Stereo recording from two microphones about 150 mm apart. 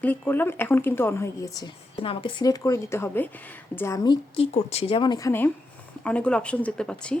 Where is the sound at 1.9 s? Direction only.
40° left (ahead or behind).